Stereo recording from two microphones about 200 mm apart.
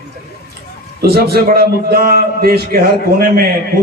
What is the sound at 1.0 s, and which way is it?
A man's voice, 50° right (ahead or behind).